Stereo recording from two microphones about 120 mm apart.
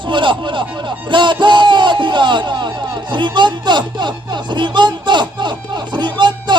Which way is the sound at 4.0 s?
40° right (ahead or behind).